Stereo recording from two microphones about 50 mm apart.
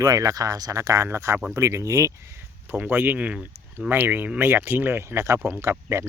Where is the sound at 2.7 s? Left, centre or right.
Right.